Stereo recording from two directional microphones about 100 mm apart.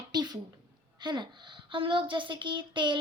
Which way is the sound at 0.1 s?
45° right (ahead or behind).